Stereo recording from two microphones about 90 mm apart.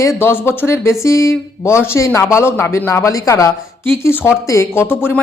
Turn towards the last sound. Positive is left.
turn(degrees=25)  # may be behind; listen again after turning